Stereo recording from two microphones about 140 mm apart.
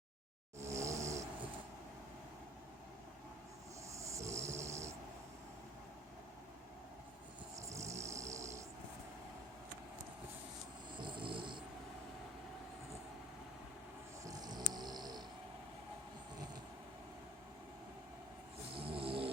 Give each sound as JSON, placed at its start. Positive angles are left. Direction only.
{"t": 0.6, "sound": "vehicle", "side_deg": -20}
{"t": 3.9, "sound": "snoring", "side_deg": -20}
{"t": 7.5, "sound": "vehicle", "side_deg": -20}
{"t": 11.0, "sound": "a sound", "side_deg": -35}
{"t": 14.3, "sound": "music", "side_deg": -30}
{"t": 18.8, "sound": "vehicle", "side_deg": -40}